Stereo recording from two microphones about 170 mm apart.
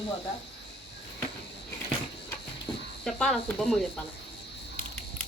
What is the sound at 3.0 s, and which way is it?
Speech, centre (ahead or behind).